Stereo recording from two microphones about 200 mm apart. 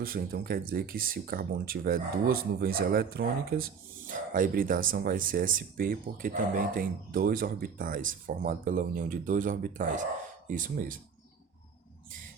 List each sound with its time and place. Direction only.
0.0 s speech: 45° right (ahead or behind)